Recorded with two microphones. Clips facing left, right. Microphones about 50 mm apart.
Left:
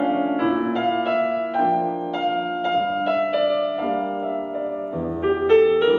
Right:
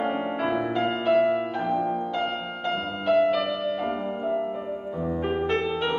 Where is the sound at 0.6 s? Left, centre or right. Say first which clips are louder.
Left 3 dB; centre.